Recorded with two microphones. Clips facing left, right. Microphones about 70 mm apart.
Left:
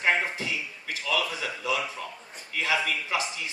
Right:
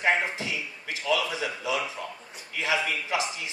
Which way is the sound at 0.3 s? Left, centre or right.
Right.